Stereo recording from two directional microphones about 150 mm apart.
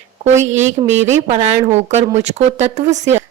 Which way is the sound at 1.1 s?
50° right (ahead or behind).